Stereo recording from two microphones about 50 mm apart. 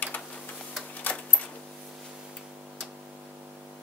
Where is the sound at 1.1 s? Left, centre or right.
Left.